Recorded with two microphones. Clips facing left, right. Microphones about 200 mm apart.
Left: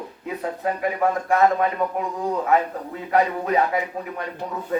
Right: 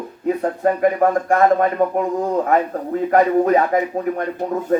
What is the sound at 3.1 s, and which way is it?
Speech, 45° right (ahead or behind).